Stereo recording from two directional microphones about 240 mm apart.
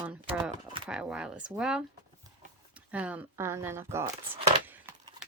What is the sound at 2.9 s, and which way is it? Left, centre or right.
Speech, centre.